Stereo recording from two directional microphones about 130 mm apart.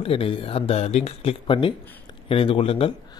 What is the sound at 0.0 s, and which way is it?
Speech, 45° left (ahead or behind).